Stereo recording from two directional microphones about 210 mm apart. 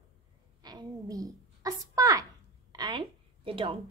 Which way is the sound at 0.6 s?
20° right (ahead or behind).